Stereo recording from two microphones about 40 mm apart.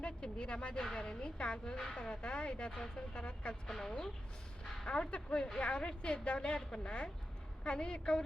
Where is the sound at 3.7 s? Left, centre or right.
Centre.